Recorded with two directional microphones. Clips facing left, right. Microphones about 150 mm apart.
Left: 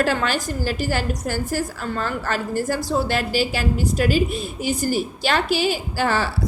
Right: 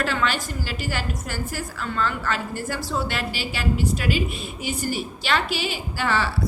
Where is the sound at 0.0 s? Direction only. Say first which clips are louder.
Left 3 dB; 45° left (ahead or behind).